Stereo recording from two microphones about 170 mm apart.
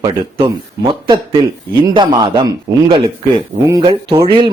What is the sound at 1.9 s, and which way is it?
Speech, 25° right (ahead or behind).